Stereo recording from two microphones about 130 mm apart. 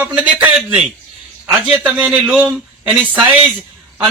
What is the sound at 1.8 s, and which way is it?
Speech, 10° right (ahead or behind).